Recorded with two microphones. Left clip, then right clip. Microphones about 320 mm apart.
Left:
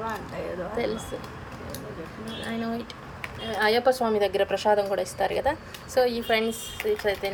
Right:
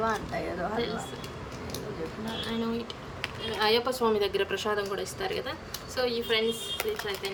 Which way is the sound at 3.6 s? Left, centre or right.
Centre.